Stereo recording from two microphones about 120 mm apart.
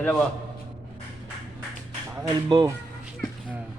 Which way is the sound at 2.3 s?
40° right (ahead or behind).